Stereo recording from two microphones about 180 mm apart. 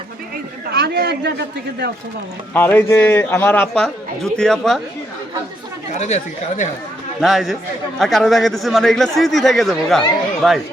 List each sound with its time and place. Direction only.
0.7 s a man's voice: 65° right (ahead or behind)
2.5 s a man's voice: 10° left (ahead or behind)
5.9 s speech: 40° left (ahead or behind)
7.2 s speech: centre (ahead or behind)